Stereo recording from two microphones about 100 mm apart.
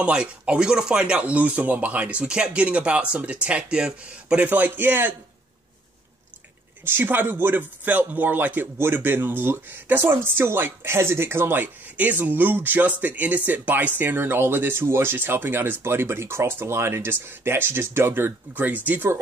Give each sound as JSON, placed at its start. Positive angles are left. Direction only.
{"t": 0.0, "sound": "speech", "side_deg": -10}
{"t": 6.8, "sound": "a man's voice", "side_deg": -20}